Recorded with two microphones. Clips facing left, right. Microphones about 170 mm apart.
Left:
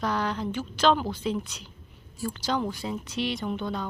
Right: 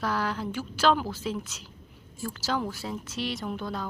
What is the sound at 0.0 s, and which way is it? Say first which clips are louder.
A woman's voice: left 1 dB; 5° right (ahead or behind).